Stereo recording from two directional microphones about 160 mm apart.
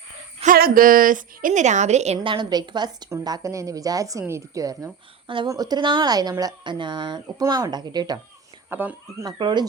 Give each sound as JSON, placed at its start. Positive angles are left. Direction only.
{"t": 0.4, "sound": "a woman's voice", "side_deg": -65}
{"t": 2.1, "sound": "speech", "side_deg": -30}
{"t": 8.7, "sound": "speech", "side_deg": -10}
{"t": 9.2, "sound": "speech", "side_deg": -30}